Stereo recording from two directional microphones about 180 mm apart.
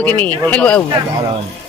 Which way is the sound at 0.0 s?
10° left (ahead or behind).